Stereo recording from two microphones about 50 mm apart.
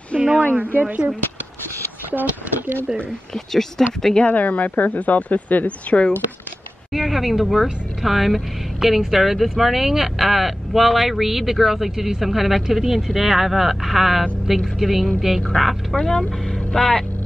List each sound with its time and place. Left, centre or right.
0.1 s a sound: centre
0.7 s speech: right
3.3 s speech: centre
4.3 s speech: left
6.9 s a sound: centre
8.0 s speech: centre